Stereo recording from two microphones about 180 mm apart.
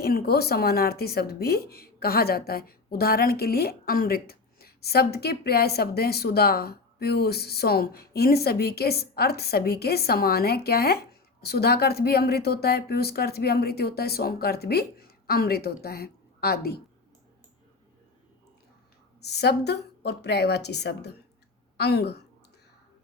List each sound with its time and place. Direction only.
0.0 s speech: 60° left (ahead or behind)
19.2 s a woman's voice: 65° left (ahead or behind)